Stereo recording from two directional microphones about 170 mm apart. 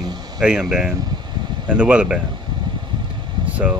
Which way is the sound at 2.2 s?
25° right (ahead or behind).